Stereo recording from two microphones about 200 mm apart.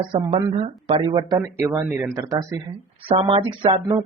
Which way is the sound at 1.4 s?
10° right (ahead or behind).